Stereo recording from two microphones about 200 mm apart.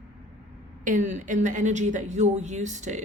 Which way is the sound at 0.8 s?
40° right (ahead or behind).